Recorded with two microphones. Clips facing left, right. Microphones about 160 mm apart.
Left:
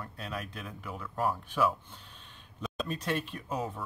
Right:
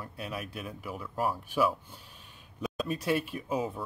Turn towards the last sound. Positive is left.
turn(degrees=-5)  # may be behind; listen again after turning